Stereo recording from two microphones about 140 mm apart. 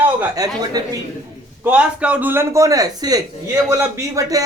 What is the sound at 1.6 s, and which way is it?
A man's voice, 10° right (ahead or behind).